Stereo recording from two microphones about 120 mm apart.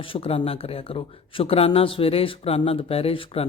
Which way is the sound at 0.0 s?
50° left (ahead or behind).